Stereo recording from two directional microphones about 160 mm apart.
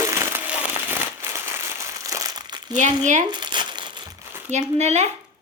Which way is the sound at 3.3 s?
30° right (ahead or behind).